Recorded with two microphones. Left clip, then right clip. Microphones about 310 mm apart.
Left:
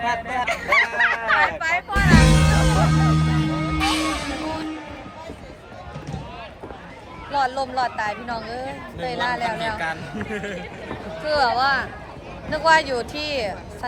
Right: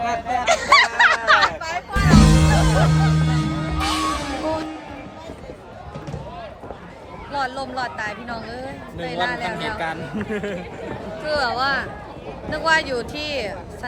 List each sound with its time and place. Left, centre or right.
0.4 s honk: centre
2.0 s music: right
7.3 s speech: centre
9.7 s speech: centre
11.2 s speech: centre